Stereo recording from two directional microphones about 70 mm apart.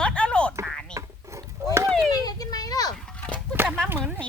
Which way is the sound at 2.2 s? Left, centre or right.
Left.